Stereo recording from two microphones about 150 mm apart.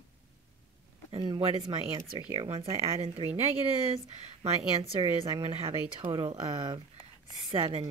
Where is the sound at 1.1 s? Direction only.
35° right (ahead or behind).